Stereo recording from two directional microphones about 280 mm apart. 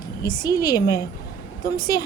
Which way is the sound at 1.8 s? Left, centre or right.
Left.